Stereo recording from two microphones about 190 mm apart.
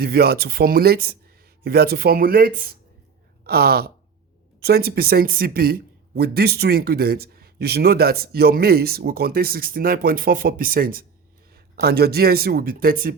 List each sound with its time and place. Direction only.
0.0 s speech: 55° right (ahead or behind)